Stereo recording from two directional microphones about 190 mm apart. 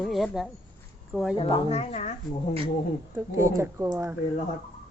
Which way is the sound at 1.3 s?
30° left (ahead or behind).